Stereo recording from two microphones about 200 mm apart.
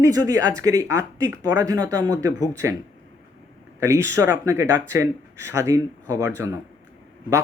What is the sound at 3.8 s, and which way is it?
A man's voice, 15° right (ahead or behind).